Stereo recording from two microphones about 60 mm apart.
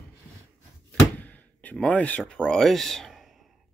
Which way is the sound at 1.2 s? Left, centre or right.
Left.